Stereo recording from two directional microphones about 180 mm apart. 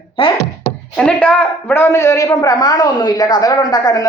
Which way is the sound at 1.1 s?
5° left (ahead or behind).